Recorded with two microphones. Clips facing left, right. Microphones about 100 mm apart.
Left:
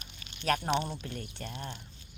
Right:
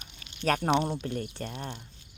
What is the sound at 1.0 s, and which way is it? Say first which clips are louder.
Speech: right 7 dB; 40° right (ahead or behind).